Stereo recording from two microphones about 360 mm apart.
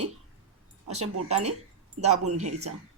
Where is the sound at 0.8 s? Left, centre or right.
Centre.